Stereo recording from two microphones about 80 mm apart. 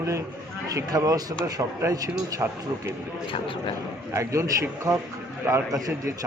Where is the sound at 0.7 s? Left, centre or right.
Right.